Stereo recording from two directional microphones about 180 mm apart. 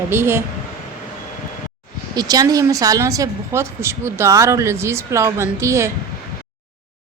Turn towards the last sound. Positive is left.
turn(degrees=-15)  # may be behind; listen again after turning